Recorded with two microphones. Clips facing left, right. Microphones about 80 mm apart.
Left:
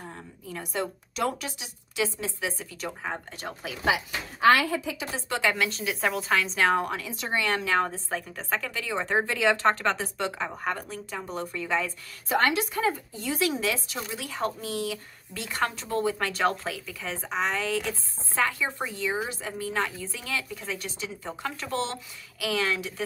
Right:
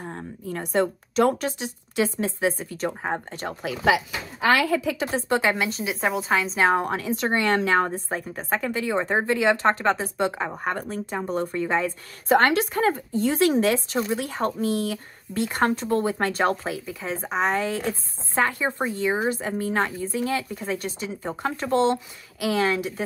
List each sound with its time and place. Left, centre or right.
0.0 s speech: right
4.6 s a woman's voice: right
4.9 s speech: right
5.6 s a woman's voice: centre
6.7 s speech: right
7.2 s a woman's voice: right; by 9.9 s centre
10.1 s speech: right
12.3 s speech: right
17.4 s speech: right